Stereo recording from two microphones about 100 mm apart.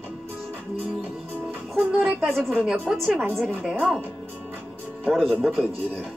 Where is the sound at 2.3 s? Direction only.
5° left (ahead or behind).